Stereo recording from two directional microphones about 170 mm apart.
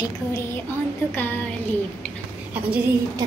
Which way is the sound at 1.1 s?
10° left (ahead or behind).